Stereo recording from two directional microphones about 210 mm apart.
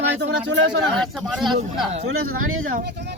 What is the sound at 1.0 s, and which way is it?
Speech, centre (ahead or behind).